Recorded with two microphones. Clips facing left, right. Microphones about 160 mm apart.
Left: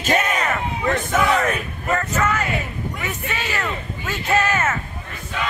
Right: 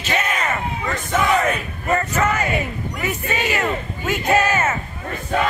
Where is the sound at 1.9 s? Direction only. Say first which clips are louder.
Right 2 dB; 10° right (ahead or behind).